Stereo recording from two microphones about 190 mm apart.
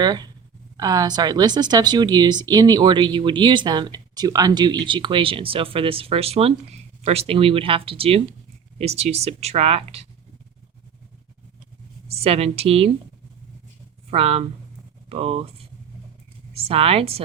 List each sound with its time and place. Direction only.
0.0 s speech: 20° right (ahead or behind)
12.1 s speech: 30° right (ahead or behind)
14.1 s speech: 30° right (ahead or behind)